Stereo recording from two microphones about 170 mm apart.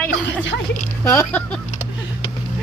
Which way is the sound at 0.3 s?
90° left.